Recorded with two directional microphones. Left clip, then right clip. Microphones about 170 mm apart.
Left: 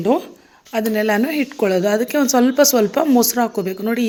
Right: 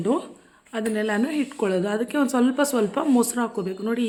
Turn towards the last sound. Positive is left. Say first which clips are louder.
# left 6 dB
turn(degrees=25)  # may be behind; listen again after turning